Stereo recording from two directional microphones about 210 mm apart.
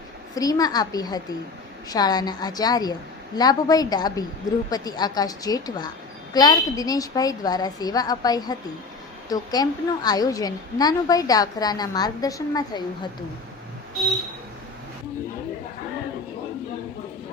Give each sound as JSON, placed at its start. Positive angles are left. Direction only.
{"t": 0.3, "sound": "a woman's voice", "side_deg": 15}